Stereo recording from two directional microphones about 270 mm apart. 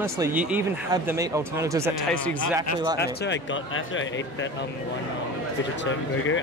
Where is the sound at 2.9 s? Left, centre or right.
Left.